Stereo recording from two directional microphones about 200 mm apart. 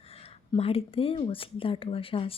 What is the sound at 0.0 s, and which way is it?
A woman's voice, 30° left (ahead or behind).